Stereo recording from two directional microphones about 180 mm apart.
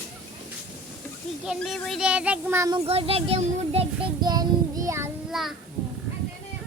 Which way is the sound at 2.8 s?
35° right (ahead or behind).